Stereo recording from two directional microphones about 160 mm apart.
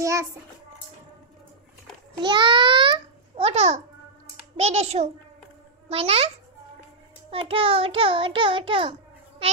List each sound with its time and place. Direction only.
0.0 s a child's voice: 20° right (ahead or behind)
2.2 s a child's voice: 30° right (ahead or behind)
4.6 s child singing: 40° right (ahead or behind)